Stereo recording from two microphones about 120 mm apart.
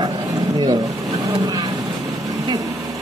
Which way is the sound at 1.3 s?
35° right (ahead or behind).